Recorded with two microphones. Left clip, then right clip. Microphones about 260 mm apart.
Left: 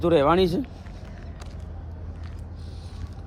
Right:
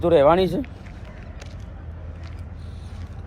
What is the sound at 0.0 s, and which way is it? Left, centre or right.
Speech, centre.